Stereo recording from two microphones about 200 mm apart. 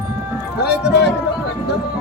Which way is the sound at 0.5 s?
55° left (ahead or behind).